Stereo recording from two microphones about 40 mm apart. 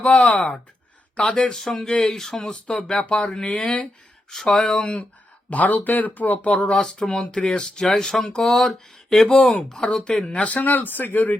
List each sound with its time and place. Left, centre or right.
0.2 s speech: left
1.8 s speech: centre
3.1 s speech: left
4.3 s speech: centre
5.5 s speech: left
6.5 s speech: left; by 9.6 s centre
9.6 s speech: left
10.7 s speech: left